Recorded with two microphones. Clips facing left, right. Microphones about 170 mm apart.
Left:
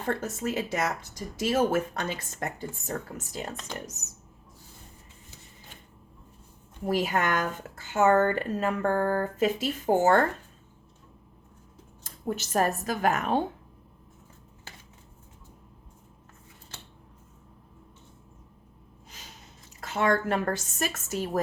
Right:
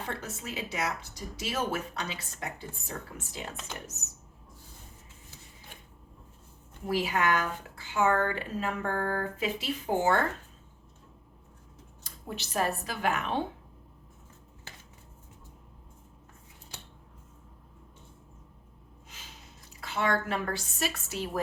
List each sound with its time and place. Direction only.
0.0 s speech: 45° left (ahead or behind)
6.8 s speech: 45° left (ahead or behind)
12.0 s speech: 45° left (ahead or behind)
19.8 s speech: 45° left (ahead or behind)